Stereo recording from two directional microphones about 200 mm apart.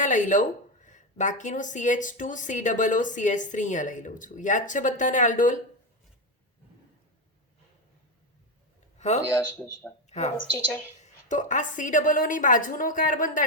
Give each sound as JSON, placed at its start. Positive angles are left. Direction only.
{"t": 0.0, "sound": "a woman's voice", "side_deg": 40}
{"t": 9.0, "sound": "a sound", "side_deg": 35}
{"t": 9.6, "sound": "speech", "side_deg": 10}
{"t": 10.1, "sound": "a woman's voice", "side_deg": 35}